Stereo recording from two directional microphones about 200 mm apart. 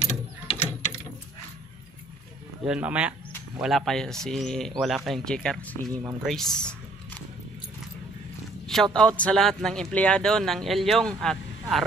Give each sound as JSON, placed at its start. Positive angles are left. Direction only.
{"t": 0.0, "sound": "mechanisms", "side_deg": 30}
{"t": 2.6, "sound": "speech", "side_deg": -5}
{"t": 8.9, "sound": "speech", "side_deg": 5}